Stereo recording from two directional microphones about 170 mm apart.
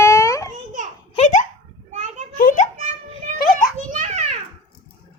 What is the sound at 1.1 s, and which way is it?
Laughter, 40° left (ahead or behind).